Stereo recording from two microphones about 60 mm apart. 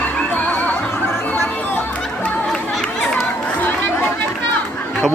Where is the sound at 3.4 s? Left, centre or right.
Left.